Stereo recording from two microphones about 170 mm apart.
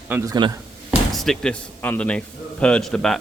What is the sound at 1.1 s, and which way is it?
A man's voice, centre (ahead or behind).